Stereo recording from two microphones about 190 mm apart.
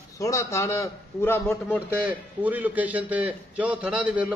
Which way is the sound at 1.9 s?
10° right (ahead or behind).